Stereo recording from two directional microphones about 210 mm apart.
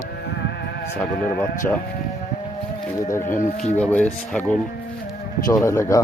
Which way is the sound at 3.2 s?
40° left (ahead or behind).